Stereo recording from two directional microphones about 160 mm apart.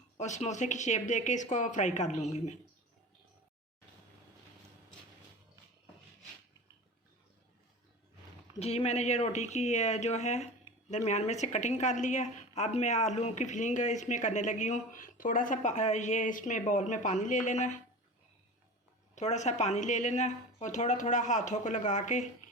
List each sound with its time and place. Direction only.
0.2 s a woman's voice: 45° left (ahead or behind)
8.5 s a woman's voice: 40° left (ahead or behind)
19.1 s a woman's voice: 45° left (ahead or behind)